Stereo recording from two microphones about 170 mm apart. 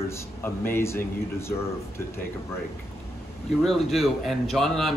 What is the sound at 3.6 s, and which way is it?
Speech, centre (ahead or behind).